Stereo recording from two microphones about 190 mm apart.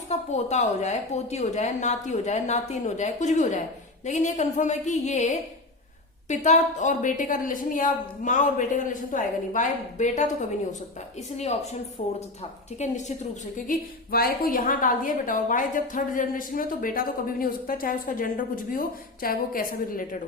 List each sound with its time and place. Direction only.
0.1 s a woman's voice: 35° left (ahead or behind)
11.3 s a woman's voice: 35° left (ahead or behind)